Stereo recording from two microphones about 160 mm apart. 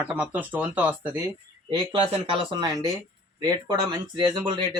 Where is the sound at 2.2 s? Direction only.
35° right (ahead or behind).